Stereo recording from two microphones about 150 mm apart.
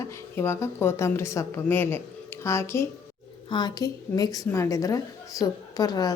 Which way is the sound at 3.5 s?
30° left (ahead or behind).